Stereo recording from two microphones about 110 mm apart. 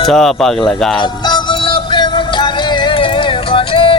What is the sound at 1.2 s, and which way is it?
Music, 45° left (ahead or behind).